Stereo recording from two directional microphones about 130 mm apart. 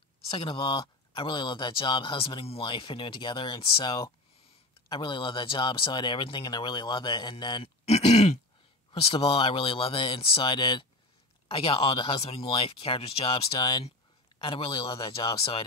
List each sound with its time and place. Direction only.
0.3 s speech: 40° left (ahead or behind)
7.8 s grunt: 55° left (ahead or behind)
9.1 s speech: 40° left (ahead or behind)